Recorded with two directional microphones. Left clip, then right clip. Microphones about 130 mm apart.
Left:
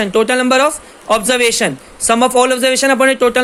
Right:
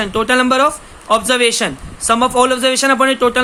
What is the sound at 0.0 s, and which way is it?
Speech, 30° left (ahead or behind).